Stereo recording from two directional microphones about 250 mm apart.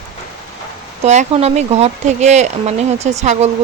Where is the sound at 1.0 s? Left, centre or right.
Right.